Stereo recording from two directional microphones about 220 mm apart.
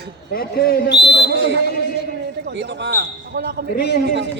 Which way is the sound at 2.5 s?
50° right (ahead or behind).